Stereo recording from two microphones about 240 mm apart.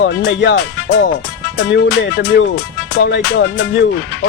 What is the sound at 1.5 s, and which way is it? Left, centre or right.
Speech, left.